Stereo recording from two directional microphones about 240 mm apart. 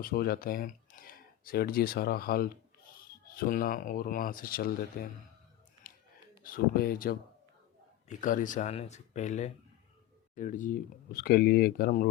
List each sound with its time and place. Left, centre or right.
0.0 s speech: left
5.8 s a sound: left
6.4 s speech: left